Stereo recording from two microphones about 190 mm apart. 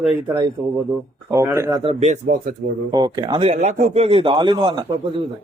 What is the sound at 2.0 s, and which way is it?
Speech, 40° right (ahead or behind).